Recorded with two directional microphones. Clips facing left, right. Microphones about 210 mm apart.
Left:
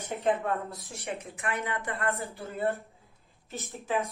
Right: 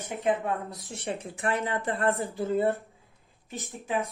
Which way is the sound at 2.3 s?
15° right (ahead or behind).